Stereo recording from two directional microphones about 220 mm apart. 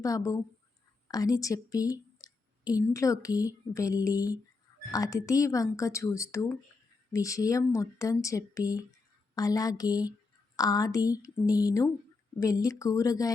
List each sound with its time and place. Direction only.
0.0 s speech: 15° left (ahead or behind)